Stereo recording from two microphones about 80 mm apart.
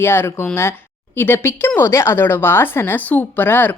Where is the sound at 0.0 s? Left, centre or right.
Left.